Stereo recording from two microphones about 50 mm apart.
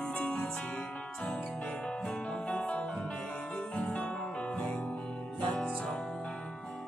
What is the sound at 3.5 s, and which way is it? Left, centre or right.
Music, left.